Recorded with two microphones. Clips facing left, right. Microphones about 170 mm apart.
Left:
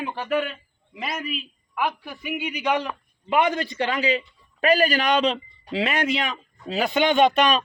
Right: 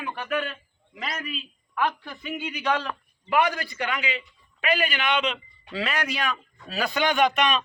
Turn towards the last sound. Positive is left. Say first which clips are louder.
# left 4 dB
turn(degrees=35)  # may be behind; listen again after turning